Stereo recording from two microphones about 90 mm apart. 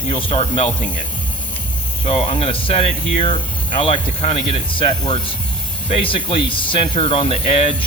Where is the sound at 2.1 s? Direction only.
90° left.